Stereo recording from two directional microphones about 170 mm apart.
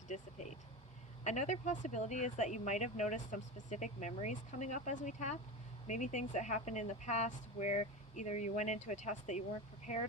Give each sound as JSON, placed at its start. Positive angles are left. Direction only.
{"t": 0.1, "sound": "speech", "side_deg": 40}